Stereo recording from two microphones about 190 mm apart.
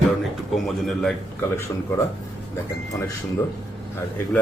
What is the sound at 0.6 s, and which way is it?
Speech, centre (ahead or behind).